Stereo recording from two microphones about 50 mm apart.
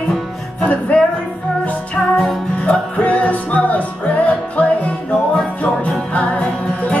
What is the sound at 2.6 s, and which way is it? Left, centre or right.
Music, left.